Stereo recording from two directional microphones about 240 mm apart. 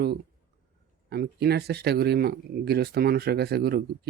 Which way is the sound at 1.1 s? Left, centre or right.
Right.